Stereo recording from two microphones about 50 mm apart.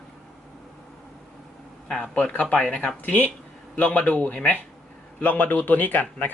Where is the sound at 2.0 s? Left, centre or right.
Left.